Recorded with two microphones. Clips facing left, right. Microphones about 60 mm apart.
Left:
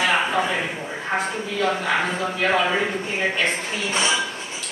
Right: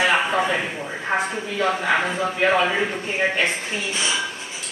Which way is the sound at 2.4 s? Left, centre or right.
Centre.